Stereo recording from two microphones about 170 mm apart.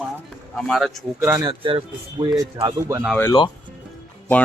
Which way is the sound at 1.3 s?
20° right (ahead or behind).